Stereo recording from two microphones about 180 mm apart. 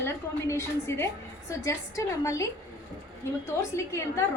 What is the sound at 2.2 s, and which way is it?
Speech, 20° left (ahead or behind).